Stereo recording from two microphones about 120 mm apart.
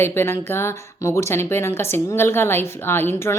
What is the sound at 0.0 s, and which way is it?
A woman's voice, 20° left (ahead or behind).